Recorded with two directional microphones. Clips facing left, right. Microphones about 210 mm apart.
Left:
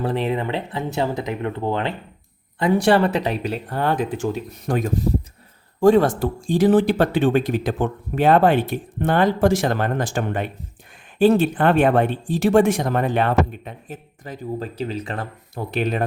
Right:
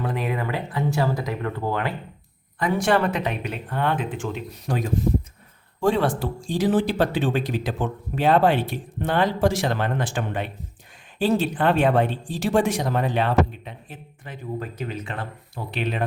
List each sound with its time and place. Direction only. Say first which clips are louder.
0.0 s speech: left 4 dB; 30° left (ahead or behind)
14.6 s speech: left 4 dB; 30° left (ahead or behind)